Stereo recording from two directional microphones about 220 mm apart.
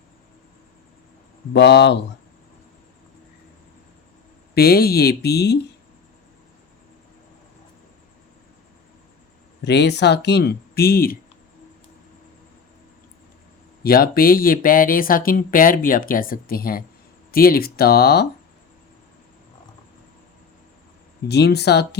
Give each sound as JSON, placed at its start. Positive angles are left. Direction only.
{"t": 1.5, "sound": "speech", "side_deg": 50}
{"t": 4.5, "sound": "speech", "side_deg": 45}
{"t": 9.6, "sound": "speech", "side_deg": 50}
{"t": 13.8, "sound": "speech", "side_deg": 45}
{"t": 21.2, "sound": "speech", "side_deg": 50}